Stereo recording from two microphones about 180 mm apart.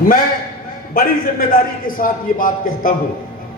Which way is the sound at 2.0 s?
50° left (ahead or behind).